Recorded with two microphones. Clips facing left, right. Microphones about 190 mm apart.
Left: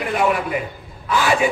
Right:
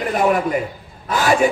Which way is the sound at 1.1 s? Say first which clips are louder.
Right 2 dB; 40° right (ahead or behind).